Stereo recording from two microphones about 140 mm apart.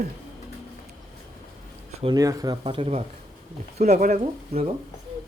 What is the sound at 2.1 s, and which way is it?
Speech, 25° right (ahead or behind).